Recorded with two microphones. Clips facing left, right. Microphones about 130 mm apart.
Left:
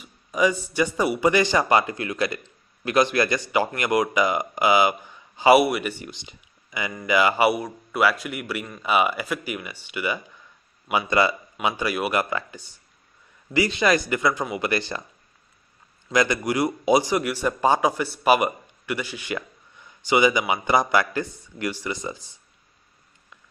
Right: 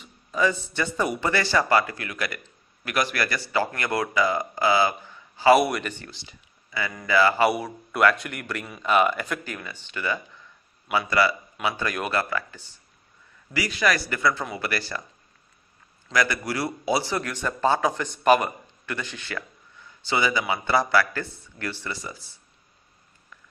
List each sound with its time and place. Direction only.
0.0 s a man's voice: 15° left (ahead or behind)
7.5 s a man's voice: centre (ahead or behind); by 11.3 s 20° left (ahead or behind)
11.6 s a man's voice: 10° left (ahead or behind)
16.1 s a man's voice: 20° left (ahead or behind)